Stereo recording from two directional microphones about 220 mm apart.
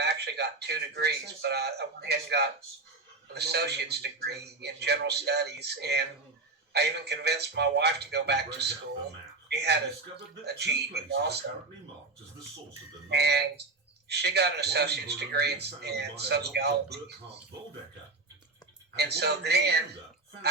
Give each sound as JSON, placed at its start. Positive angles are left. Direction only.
{"t": 0.0, "sound": "speech", "side_deg": -50}
{"t": 13.1, "sound": "speech", "side_deg": -50}
{"t": 18.9, "sound": "speech", "side_deg": -50}